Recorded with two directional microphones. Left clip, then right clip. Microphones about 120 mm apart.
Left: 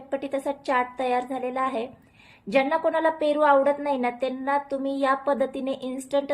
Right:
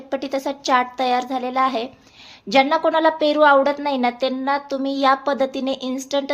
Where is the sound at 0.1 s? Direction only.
30° right (ahead or behind).